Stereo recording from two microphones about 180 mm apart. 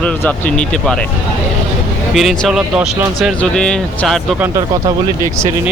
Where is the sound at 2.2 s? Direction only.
Centre (ahead or behind).